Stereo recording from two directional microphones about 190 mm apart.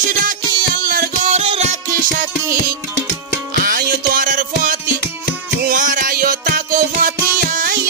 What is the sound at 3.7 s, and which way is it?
Music, 45° right (ahead or behind).